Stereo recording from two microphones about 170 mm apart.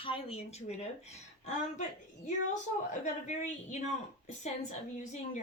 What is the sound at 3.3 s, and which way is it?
A woman's voice, 45° left (ahead or behind).